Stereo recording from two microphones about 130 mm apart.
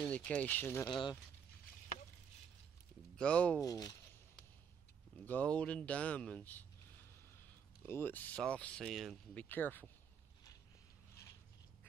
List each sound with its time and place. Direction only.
0.0 s speech: 10° left (ahead or behind)
0.8 s speech: 35° left (ahead or behind)
3.2 s speech: 10° left (ahead or behind)
3.6 s speech: 30° left (ahead or behind)
5.2 s speech: 10° left (ahead or behind)
7.8 s speech: 15° left (ahead or behind); by 9.2 s centre (ahead or behind)
9.3 s speech: 10° left (ahead or behind)